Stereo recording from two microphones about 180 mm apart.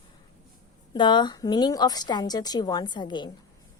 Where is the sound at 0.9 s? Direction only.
25° left (ahead or behind).